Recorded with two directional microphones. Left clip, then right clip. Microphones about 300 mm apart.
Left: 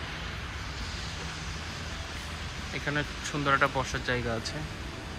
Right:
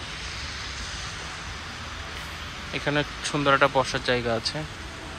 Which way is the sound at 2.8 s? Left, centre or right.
Centre.